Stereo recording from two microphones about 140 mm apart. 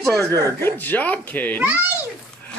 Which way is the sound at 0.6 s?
15° left (ahead or behind).